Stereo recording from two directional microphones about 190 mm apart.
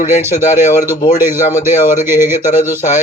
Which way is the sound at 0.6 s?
40° left (ahead or behind).